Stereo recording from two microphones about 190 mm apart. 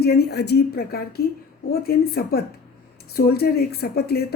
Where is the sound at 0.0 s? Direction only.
55° left (ahead or behind).